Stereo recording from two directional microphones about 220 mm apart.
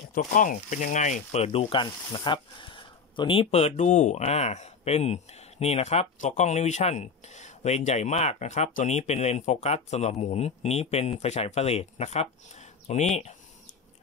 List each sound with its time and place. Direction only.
0.1 s speech: 35° left (ahead or behind)